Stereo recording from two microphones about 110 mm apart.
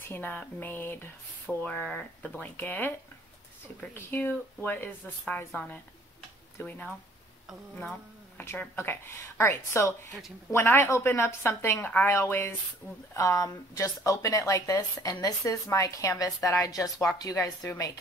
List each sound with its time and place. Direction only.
0.1 s speech: 15° left (ahead or behind)
3.9 s speech: 20° left (ahead or behind)
8.4 s a woman's voice: 20° left (ahead or behind)